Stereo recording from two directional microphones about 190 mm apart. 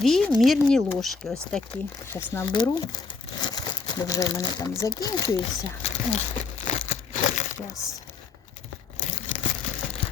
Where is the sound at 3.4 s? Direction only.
20° left (ahead or behind).